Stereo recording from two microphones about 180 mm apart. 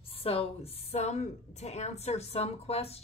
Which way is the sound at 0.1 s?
30° left (ahead or behind).